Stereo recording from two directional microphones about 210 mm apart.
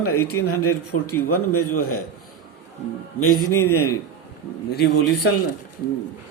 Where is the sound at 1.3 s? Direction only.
90° left.